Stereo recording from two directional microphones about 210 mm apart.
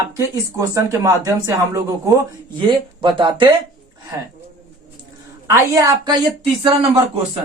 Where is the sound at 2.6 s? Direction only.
20° right (ahead or behind).